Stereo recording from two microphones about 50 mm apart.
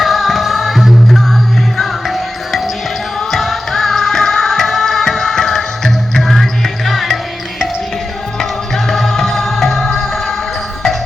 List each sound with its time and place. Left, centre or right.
0.0 s music: centre
8.4 s music: centre